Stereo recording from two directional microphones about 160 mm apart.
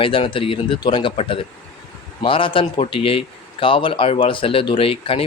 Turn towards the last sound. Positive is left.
turn(degrees=35)  # may be behind; listen again after turning